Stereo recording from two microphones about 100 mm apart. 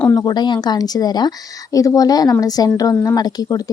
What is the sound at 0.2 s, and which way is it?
Speech, 45° left (ahead or behind).